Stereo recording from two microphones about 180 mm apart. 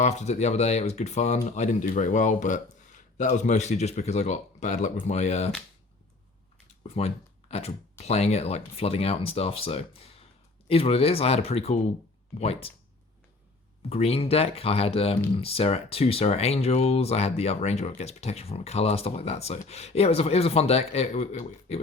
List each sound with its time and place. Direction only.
0.0 s speech: 40° left (ahead or behind)
6.8 s speech: 35° left (ahead or behind)
13.9 s speech: 35° left (ahead or behind)